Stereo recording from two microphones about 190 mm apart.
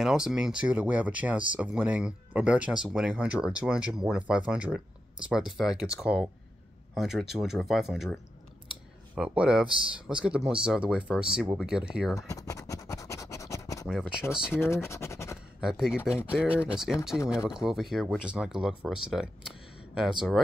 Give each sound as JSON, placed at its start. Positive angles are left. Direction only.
{"t": 0.0, "sound": "speech", "side_deg": -5}
{"t": 12.2, "sound": "scratch", "side_deg": 15}
{"t": 13.8, "sound": "speech", "side_deg": 0}
{"t": 14.5, "sound": "speech", "side_deg": 15}
{"t": 15.6, "sound": "speech", "side_deg": -5}